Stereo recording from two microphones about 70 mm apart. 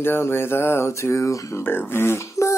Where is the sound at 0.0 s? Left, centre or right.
Left.